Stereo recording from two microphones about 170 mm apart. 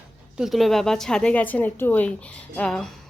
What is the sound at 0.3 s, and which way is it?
A woman's voice, centre (ahead or behind).